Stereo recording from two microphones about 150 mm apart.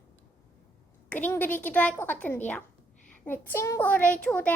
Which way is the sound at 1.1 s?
10° left (ahead or behind).